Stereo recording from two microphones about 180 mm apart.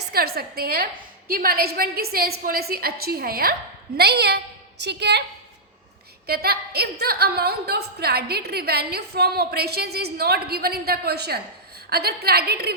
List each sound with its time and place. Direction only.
0.1 s a woman's voice: 60° right (ahead or behind)
6.2 s a woman's voice: 60° right (ahead or behind)